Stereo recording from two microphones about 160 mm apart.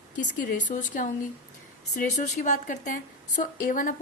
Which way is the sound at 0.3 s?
55° left (ahead or behind).